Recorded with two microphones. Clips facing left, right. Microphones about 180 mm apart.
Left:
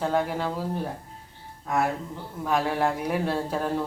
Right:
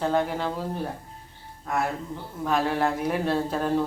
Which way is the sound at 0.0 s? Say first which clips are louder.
Right 1 dB; 5° left (ahead or behind).